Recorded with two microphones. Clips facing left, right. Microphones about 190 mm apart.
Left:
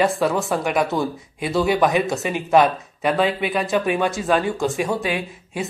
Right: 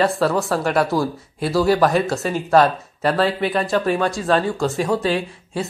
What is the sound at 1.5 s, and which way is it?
Speech, centre (ahead or behind).